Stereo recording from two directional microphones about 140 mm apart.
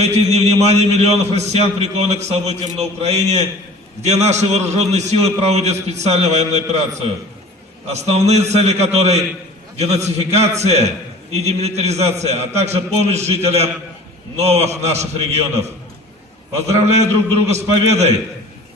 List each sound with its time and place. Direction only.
0.0 s a man's voice: 50° right (ahead or behind)
16.7 s a man's voice: 50° right (ahead or behind)